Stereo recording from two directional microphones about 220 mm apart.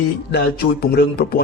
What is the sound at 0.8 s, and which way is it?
Speech, 45° left (ahead or behind).